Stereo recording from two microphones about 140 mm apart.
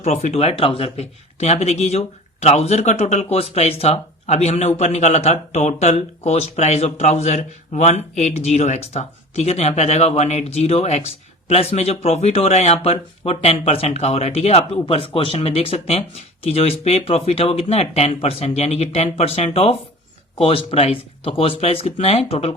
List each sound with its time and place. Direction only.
0.0 s speech: 55° left (ahead or behind)